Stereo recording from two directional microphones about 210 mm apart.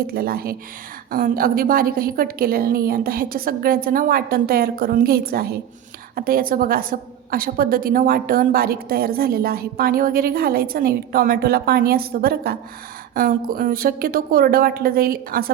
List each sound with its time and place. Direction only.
0.0 s a woman's voice: 45° right (ahead or behind)